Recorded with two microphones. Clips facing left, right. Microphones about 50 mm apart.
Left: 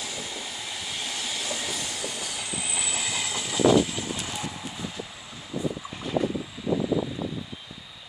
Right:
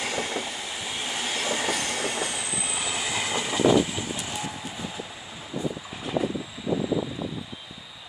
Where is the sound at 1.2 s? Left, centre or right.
Right.